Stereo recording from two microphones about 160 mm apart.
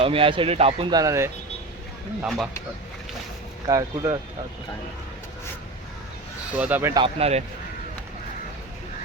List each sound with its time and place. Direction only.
0.0 s speech: 35° right (ahead or behind)
3.7 s speech: 25° right (ahead or behind)
6.5 s speech: 10° right (ahead or behind)
6.9 s speech: 35° right (ahead or behind)